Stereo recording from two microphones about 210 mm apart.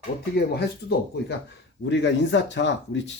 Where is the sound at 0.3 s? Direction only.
50° left (ahead or behind).